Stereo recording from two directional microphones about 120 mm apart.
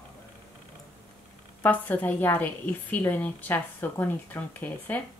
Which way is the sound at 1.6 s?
15° left (ahead or behind).